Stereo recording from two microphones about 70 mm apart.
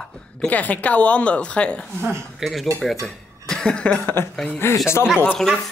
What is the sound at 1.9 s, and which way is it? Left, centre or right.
Speech, right.